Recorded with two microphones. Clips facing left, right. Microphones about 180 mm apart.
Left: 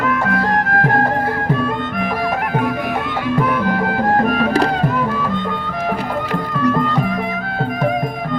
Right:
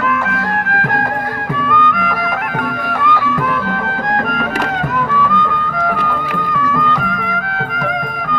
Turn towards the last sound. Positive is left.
turn(degrees=30)  # may be behind; listen again after turning